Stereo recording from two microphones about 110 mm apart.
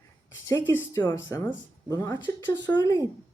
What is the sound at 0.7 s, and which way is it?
A woman's voice, 20° left (ahead or behind).